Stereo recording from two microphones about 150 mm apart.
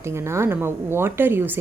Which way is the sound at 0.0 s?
15° right (ahead or behind).